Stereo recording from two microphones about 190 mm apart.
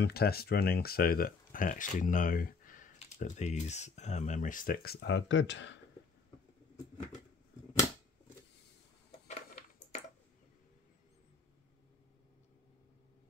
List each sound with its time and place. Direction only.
0.0 s speech: 55° left (ahead or behind)
5.0 s speech: 75° left (ahead or behind)
9.3 s a sound: 35° left (ahead or behind)